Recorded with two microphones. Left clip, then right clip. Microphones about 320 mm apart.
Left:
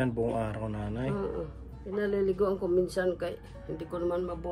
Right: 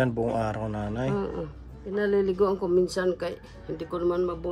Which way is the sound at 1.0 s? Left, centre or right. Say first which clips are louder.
Right 1 dB; right.